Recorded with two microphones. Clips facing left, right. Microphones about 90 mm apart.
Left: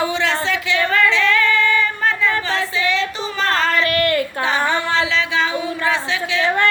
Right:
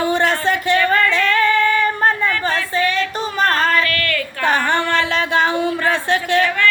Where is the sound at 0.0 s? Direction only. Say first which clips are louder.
Right 3 dB; 50° right (ahead or behind).